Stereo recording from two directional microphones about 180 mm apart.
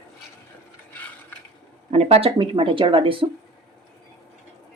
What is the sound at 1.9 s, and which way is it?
Speech, 35° right (ahead or behind).